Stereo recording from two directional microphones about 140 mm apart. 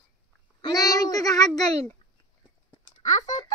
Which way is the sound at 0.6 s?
25° left (ahead or behind).